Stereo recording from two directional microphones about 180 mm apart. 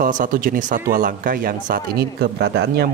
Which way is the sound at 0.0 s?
45° right (ahead or behind).